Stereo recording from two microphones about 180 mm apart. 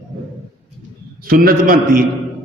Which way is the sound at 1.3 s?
50° right (ahead or behind).